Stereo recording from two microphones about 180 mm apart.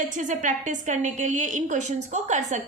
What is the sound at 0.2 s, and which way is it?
A woman's voice, 45° right (ahead or behind).